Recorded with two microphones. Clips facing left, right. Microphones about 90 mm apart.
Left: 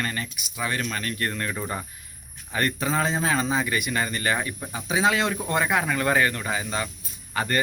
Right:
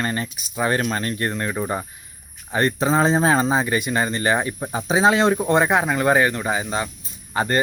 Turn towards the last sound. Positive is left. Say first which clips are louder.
# right 5 dB
turn(degrees=-30)  # may be behind; listen again after turning